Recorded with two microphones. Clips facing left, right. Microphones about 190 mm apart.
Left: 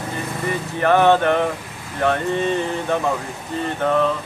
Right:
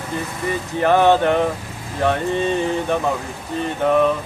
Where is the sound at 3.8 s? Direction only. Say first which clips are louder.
Right 3 dB; 10° right (ahead or behind).